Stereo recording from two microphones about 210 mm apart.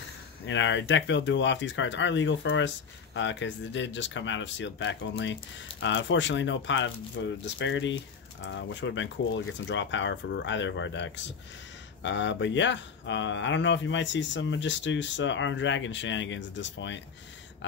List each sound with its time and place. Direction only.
0.5 s speech: 60° left (ahead or behind)